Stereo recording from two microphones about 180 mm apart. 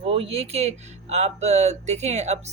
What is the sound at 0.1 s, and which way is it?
Speech, 35° right (ahead or behind).